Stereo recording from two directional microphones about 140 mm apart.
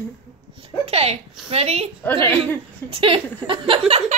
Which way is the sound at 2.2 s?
15° left (ahead or behind).